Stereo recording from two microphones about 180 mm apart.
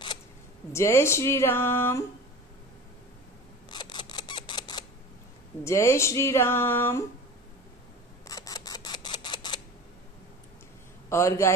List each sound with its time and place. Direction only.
0.7 s speech: 15° left (ahead or behind)
3.7 s camera: 25° left (ahead or behind)
5.6 s speech: 15° left (ahead or behind)
8.3 s camera: 20° left (ahead or behind)
11.1 s a man's voice: 15° left (ahead or behind)